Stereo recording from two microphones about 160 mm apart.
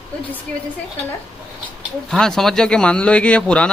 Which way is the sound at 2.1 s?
5° left (ahead or behind).